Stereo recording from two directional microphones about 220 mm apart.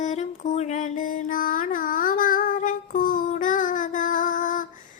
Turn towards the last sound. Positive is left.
turn(degrees=35)  # may be behind; listen again after turning